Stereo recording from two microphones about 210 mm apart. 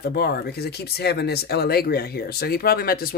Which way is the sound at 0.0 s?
50° left (ahead or behind).